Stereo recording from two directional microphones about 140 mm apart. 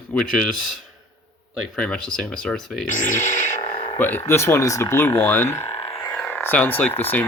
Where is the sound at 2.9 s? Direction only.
65° left (ahead or behind).